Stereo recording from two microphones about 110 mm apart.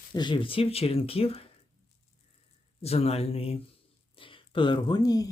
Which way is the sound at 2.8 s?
70° left (ahead or behind).